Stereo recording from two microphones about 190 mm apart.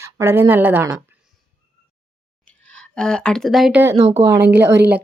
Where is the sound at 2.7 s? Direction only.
5° left (ahead or behind).